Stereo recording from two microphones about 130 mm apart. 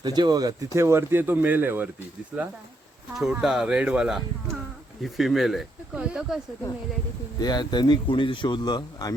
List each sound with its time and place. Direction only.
0.0 s speech: 35° right (ahead or behind); by 1.9 s 15° right (ahead or behind)
3.2 s speech: 5° right (ahead or behind)
7.3 s speech: 30° left (ahead or behind)